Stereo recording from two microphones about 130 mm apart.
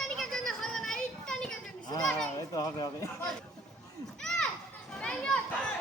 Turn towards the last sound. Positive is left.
turn(degrees=5)  # may be behind; listen again after turning